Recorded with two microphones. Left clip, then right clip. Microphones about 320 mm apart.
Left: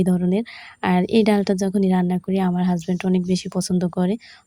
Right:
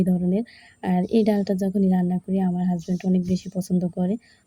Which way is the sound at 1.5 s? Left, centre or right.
Left.